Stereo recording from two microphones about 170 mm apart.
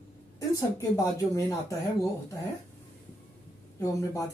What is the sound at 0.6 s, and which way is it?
Speech, 20° left (ahead or behind).